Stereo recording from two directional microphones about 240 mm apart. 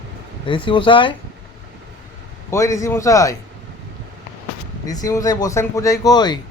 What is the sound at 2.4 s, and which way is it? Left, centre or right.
Speech, centre.